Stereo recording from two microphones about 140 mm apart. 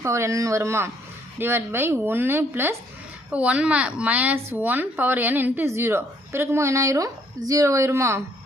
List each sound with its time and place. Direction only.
0.0 s speech: 20° right (ahead or behind)